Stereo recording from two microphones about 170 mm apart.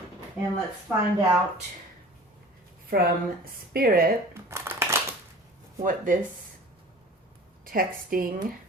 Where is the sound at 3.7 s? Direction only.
60° right (ahead or behind).